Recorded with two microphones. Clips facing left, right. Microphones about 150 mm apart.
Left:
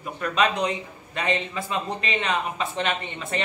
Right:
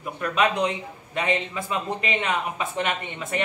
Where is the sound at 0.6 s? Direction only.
15° right (ahead or behind).